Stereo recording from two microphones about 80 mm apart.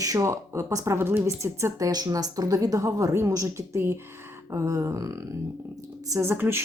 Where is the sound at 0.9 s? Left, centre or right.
Right.